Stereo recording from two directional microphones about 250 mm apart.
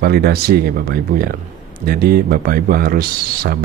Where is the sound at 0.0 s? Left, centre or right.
Right.